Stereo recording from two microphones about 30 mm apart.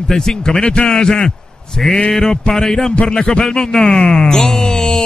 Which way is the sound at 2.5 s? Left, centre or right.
Centre.